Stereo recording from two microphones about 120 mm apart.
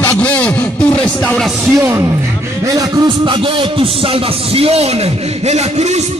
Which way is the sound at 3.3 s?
45° right (ahead or behind).